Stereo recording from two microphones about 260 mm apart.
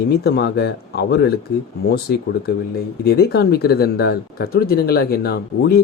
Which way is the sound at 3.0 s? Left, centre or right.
Left.